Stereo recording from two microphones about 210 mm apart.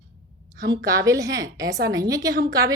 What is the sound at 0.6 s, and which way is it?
A woman's voice, 15° right (ahead or behind).